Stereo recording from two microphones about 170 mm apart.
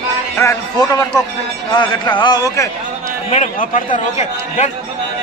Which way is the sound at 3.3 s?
45° left (ahead or behind).